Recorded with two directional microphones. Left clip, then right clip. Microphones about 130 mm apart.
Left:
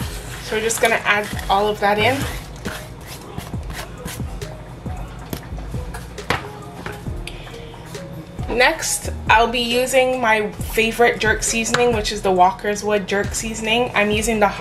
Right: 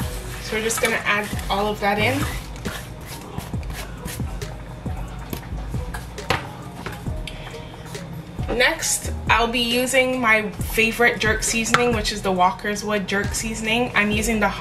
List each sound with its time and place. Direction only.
0.5 s a woman's voice: 15° left (ahead or behind)
8.5 s a woman's voice: 15° left (ahead or behind)
11.3 s a woman's voice: 15° right (ahead or behind)
11.8 s a woman's voice: 15° left (ahead or behind)